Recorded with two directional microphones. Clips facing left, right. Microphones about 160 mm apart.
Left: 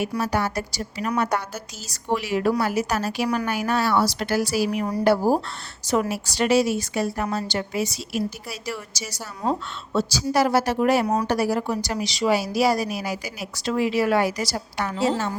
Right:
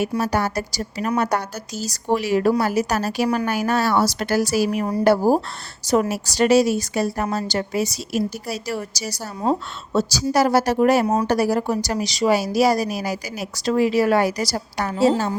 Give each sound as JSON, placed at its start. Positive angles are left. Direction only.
{"t": 0.2, "sound": "a woman's voice", "side_deg": -40}
{"t": 11.0, "sound": "speech", "side_deg": -25}
{"t": 11.3, "sound": "a woman's voice", "side_deg": -40}